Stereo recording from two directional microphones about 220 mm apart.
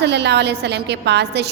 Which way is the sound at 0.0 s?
50° right (ahead or behind).